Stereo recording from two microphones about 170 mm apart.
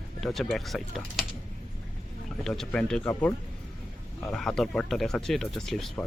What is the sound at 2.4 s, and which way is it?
Speech, 5° left (ahead or behind).